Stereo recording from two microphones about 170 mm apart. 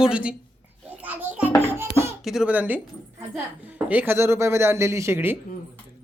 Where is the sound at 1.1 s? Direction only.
10° right (ahead or behind).